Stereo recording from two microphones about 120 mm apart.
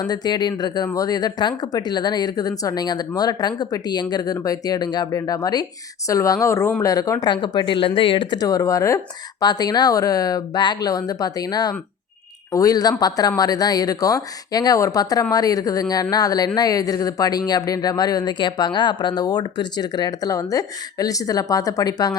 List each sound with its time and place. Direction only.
0.0 s speech: 35° left (ahead or behind); by 6.9 s 20° left (ahead or behind)
6.9 s speech: 30° left (ahead or behind)